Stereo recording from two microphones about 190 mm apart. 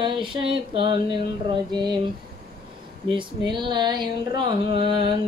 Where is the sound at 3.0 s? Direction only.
25° right (ahead or behind).